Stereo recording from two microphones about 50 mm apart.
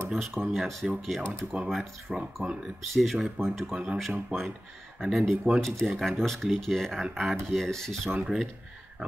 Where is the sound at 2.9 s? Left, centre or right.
Centre.